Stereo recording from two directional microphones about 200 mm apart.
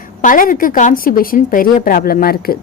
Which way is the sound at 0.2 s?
40° left (ahead or behind).